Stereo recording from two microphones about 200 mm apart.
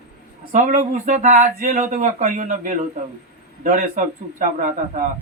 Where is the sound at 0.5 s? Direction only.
40° right (ahead or behind).